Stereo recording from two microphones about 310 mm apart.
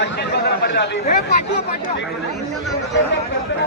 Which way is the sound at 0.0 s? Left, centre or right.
Left.